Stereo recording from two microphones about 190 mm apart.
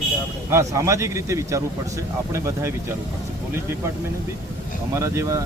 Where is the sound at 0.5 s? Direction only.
15° right (ahead or behind).